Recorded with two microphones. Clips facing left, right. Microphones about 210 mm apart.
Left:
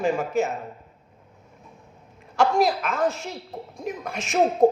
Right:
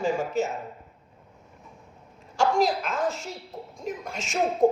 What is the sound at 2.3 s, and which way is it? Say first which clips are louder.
A man's voice: left 2 dB; 65° left (ahead or behind).